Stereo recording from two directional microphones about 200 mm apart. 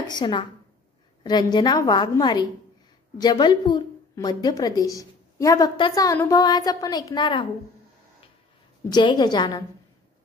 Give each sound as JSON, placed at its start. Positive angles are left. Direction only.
{"t": 0.1, "sound": "a woman's voice", "side_deg": 25}
{"t": 8.9, "sound": "a woman's voice", "side_deg": 20}